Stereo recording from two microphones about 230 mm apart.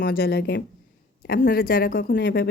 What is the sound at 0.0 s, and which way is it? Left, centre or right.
A woman's voice, left.